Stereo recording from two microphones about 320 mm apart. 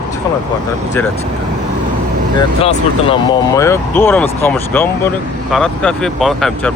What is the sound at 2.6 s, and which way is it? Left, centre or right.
Speech, centre.